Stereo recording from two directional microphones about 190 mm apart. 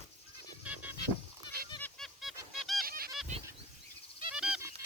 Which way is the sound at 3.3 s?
35° right (ahead or behind).